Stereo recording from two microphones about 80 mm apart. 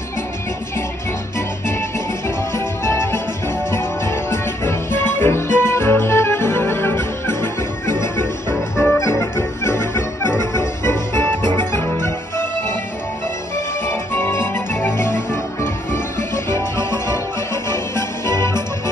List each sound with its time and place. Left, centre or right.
2.2 s music: left
13.8 s music: left